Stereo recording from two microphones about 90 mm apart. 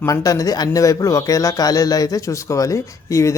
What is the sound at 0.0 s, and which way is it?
A man's voice, 40° left (ahead or behind).